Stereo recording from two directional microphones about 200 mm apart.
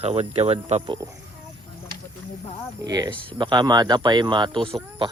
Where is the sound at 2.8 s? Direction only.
20° right (ahead or behind).